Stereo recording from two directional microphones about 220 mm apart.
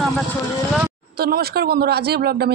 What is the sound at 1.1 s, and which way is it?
Speech, 45° right (ahead or behind).